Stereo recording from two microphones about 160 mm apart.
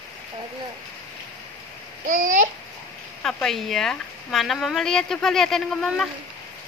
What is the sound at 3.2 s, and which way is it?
Speech, centre (ahead or behind).